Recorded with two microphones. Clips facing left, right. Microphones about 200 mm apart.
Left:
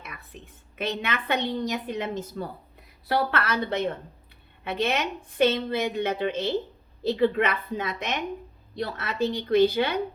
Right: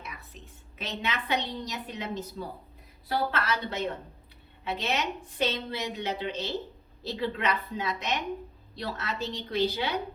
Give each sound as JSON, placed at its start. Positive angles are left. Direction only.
{"t": 0.3, "sound": "a woman's voice", "side_deg": 55}
{"t": 3.1, "sound": "a woman's voice", "side_deg": 65}